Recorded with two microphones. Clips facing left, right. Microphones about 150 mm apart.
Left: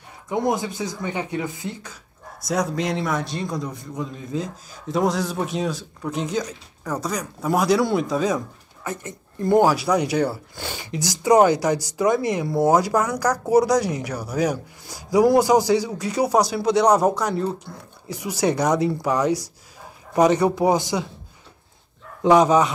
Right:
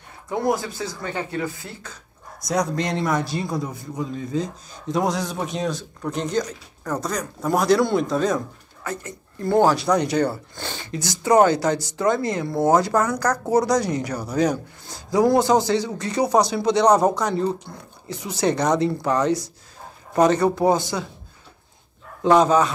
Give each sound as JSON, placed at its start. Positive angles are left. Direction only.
{"t": 0.3, "sound": "speech", "side_deg": 20}
{"t": 2.4, "sound": "a man's voice", "side_deg": 5}
{"t": 8.8, "sound": "speech", "side_deg": 20}
{"t": 22.2, "sound": "speech", "side_deg": 15}